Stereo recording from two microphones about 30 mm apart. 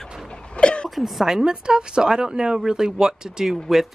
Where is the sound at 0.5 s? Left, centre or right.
Left.